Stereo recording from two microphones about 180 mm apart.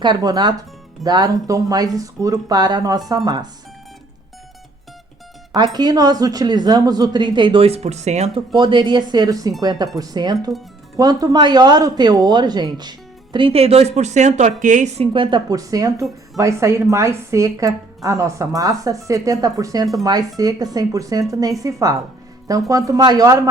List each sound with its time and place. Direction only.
0.0 s speech: 25° right (ahead or behind)
5.5 s speech: 25° right (ahead or behind); by 8.3 s 40° right (ahead or behind)
8.5 s speech: 25° right (ahead or behind)